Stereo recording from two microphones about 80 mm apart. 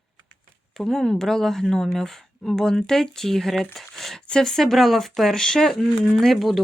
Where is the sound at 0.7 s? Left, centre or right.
Centre.